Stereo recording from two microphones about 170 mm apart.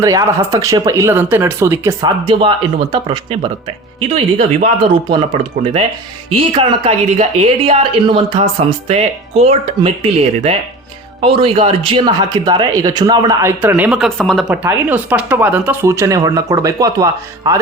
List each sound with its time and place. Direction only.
0.0 s speech: 20° right (ahead or behind); by 4.7 s 40° right (ahead or behind)
6.3 s speech: 35° right (ahead or behind)
13.6 s speech: 10° right (ahead or behind)
14.5 s speech: 10° right (ahead or behind)